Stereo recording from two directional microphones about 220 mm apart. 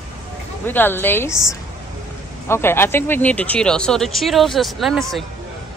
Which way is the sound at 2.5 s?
10° left (ahead or behind).